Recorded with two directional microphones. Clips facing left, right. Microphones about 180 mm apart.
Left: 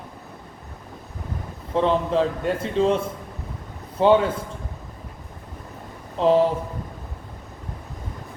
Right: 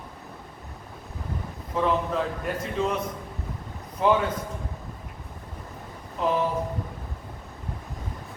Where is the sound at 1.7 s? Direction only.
30° left (ahead or behind).